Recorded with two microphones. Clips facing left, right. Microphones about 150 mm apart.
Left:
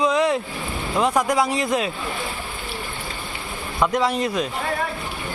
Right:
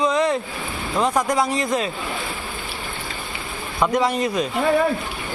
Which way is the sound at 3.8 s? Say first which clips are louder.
Right 1 dB; centre (ahead or behind).